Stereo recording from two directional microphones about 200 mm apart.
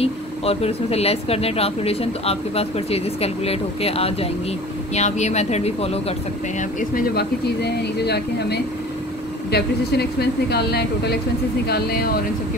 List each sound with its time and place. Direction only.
0.0 s speech: 30° left (ahead or behind)
6.8 s speech: 45° left (ahead or behind)